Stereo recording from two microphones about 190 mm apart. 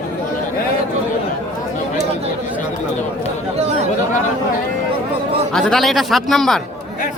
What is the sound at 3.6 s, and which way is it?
Chatter, 35° right (ahead or behind).